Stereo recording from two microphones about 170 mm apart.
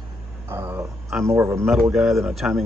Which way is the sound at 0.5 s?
15° right (ahead or behind).